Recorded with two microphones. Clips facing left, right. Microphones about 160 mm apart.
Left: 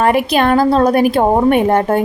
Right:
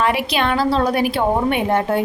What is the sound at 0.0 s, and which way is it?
A woman's voice, 45° left (ahead or behind).